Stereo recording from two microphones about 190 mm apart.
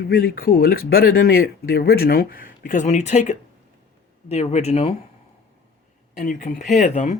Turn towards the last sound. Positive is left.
turn(degrees=40)  # may be behind; listen again after turning